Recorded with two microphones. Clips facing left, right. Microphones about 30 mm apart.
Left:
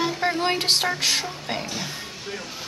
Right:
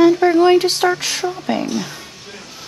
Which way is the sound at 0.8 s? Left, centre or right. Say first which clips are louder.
Right 9 dB; right.